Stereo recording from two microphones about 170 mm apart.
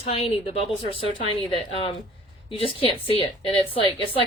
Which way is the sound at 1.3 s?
30° left (ahead or behind).